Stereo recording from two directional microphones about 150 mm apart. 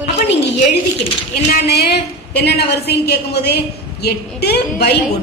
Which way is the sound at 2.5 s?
90° left.